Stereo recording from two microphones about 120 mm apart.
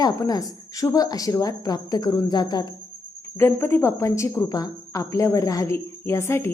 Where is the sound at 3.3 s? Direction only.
20° left (ahead or behind).